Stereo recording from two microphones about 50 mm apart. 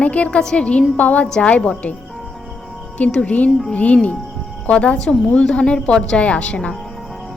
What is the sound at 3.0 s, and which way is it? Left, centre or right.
A woman's voice, left.